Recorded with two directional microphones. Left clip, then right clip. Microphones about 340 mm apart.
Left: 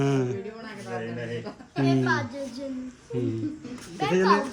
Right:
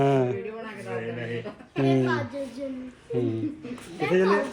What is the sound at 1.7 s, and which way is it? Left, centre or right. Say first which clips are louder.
Speech: right 1 dB; centre.